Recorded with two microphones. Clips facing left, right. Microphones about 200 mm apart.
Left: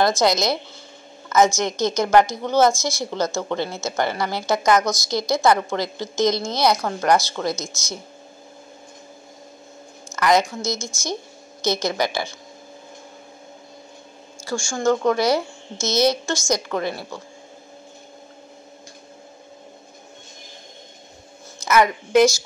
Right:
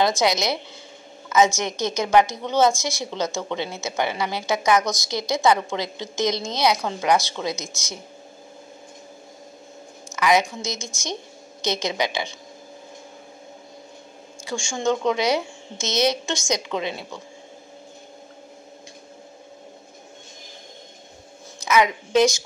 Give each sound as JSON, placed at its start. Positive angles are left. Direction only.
{"t": 0.0, "sound": "a woman's voice", "side_deg": -10}
{"t": 10.1, "sound": "a woman's voice", "side_deg": -10}
{"t": 14.4, "sound": "a woman's voice", "side_deg": -20}
{"t": 21.6, "sound": "a woman's voice", "side_deg": -15}